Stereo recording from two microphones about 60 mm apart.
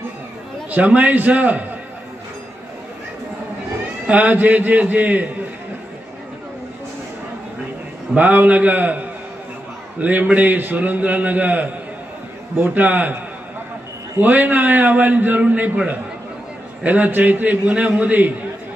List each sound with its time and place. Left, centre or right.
0.7 s a man's voice: right
4.1 s a man's voice: right
8.1 s a man's voice: right
14.2 s a man's voice: right